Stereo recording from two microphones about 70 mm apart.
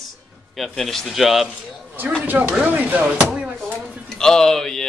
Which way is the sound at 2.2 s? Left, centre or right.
Right.